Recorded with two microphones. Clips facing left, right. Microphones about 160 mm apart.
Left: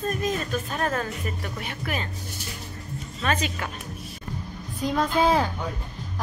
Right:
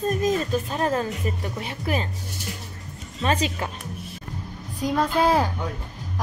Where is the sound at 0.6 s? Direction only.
25° right (ahead or behind).